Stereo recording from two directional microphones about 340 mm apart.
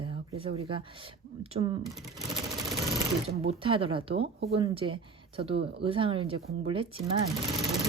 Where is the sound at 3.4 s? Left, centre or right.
Centre.